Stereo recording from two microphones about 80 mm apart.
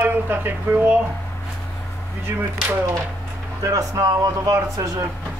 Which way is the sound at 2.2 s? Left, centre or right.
Right.